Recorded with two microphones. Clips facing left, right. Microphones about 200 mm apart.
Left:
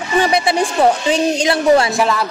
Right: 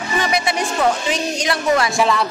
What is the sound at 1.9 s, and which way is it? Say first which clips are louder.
Speech: left 1 dB; centre (ahead or behind).